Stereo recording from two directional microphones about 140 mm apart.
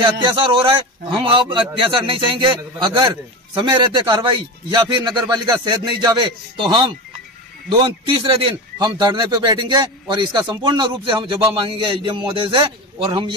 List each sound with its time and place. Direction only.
0.0 s a man's voice: 35° right (ahead or behind)